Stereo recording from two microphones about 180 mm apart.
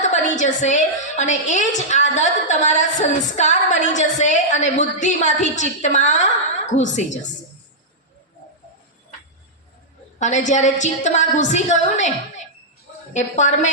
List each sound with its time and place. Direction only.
0.0 s a woman's voice: 40° left (ahead or behind)
10.2 s a woman's voice: 40° left (ahead or behind)
13.1 s a woman's voice: 40° left (ahead or behind)